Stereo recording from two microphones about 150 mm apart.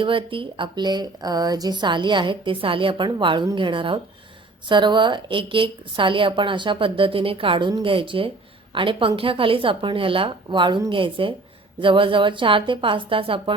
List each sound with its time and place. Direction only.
0.0 s speech: 35° right (ahead or behind)